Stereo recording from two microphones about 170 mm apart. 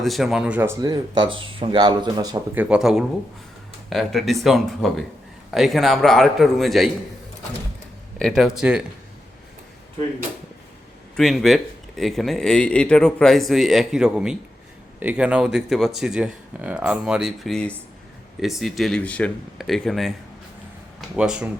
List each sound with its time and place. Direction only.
0.0 s speech: centre (ahead or behind); by 2.4 s 25° right (ahead or behind)
2.6 s speech: 5° right (ahead or behind)
8.2 s speech: centre (ahead or behind)
11.2 s speech: centre (ahead or behind)
21.2 s speech: 5° right (ahead or behind)